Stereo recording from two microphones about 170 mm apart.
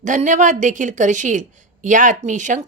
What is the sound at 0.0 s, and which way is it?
A woman's voice, 50° right (ahead or behind).